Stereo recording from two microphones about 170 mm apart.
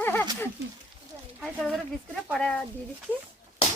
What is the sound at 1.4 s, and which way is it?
A child's voice, centre (ahead or behind).